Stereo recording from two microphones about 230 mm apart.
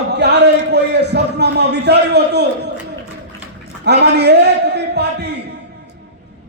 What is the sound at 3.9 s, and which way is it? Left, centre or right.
A man's voice, right.